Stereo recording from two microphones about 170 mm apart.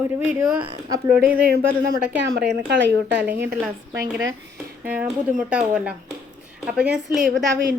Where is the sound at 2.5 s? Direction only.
90° right.